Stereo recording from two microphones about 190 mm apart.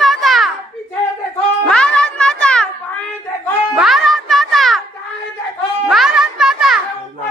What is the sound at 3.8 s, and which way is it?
Music, centre (ahead or behind).